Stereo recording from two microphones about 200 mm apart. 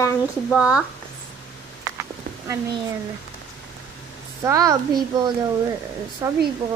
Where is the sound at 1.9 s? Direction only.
15° right (ahead or behind).